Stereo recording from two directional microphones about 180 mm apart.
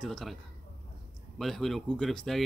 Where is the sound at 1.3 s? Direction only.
Centre (ahead or behind).